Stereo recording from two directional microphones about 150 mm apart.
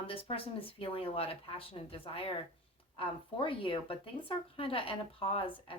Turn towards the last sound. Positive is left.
turn(degrees=35)  # may be behind; listen again after turning